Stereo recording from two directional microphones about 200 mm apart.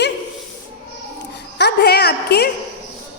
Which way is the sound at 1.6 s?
55° left (ahead or behind).